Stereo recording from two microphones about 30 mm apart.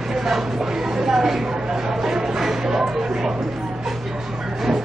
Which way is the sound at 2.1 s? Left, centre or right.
Centre.